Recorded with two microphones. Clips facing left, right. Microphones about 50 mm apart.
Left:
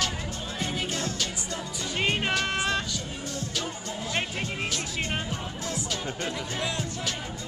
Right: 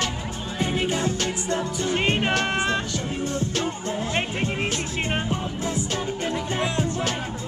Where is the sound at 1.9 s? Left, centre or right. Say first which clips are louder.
Right 3 dB; right.